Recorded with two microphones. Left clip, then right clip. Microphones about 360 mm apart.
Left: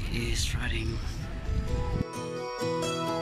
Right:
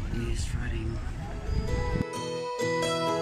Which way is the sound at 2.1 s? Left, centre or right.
Centre.